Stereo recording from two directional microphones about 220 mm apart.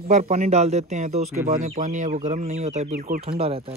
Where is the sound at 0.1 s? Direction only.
30° right (ahead or behind).